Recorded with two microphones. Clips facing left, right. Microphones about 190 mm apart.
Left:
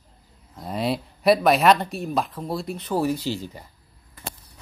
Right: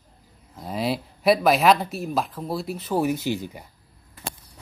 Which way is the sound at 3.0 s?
20° right (ahead or behind).